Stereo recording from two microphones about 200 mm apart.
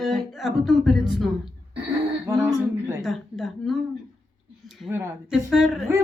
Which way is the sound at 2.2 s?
15° right (ahead or behind).